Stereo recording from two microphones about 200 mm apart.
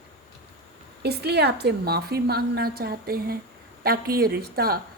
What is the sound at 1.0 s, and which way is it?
Speech, 55° right (ahead or behind).